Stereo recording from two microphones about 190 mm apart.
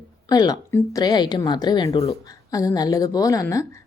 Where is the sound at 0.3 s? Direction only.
20° left (ahead or behind).